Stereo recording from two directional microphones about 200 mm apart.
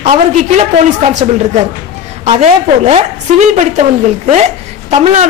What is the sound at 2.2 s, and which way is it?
A woman's voice, 30° right (ahead or behind).